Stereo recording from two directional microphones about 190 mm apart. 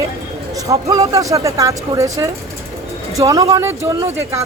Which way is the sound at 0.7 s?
15° right (ahead or behind).